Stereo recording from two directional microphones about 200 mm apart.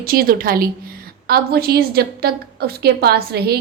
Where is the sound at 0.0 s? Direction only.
50° right (ahead or behind).